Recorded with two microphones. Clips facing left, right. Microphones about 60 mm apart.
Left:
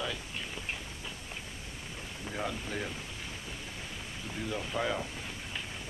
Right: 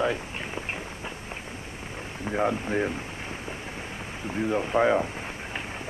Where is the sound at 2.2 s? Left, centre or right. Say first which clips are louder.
Right 11 dB; right.